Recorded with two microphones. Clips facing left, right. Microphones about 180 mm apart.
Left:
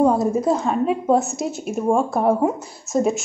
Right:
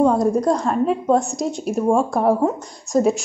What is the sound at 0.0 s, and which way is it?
A woman's voice, 5° left (ahead or behind).